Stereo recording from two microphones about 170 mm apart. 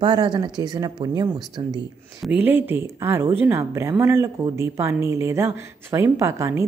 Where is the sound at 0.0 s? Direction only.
25° right (ahead or behind).